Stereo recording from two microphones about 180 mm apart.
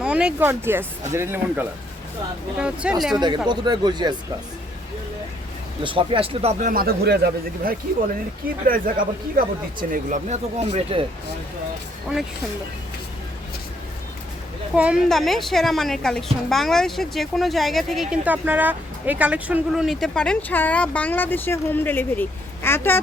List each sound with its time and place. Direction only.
0.0 s a woman's voice: 5° right (ahead or behind)
3.2 s speech: 25° right (ahead or behind)
5.8 s speech: 30° right (ahead or behind)
14.8 s a woman's voice: 5° right (ahead or behind); by 23.0 s 15° left (ahead or behind)